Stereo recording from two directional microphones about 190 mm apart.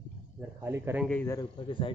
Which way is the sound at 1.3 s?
25° left (ahead or behind).